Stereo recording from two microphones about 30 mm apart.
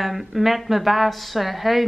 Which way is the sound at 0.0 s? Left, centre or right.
Centre.